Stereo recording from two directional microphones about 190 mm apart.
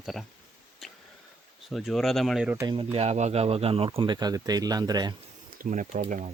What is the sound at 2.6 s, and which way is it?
Speech, 25° right (ahead or behind).